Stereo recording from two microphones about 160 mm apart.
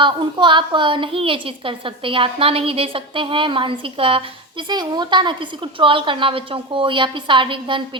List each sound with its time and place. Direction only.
0.0 s a woman's voice: 30° right (ahead or behind)